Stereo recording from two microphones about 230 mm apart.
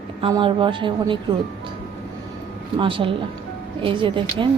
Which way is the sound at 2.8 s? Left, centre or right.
Right.